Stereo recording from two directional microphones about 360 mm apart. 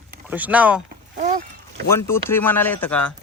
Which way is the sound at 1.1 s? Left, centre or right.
Right.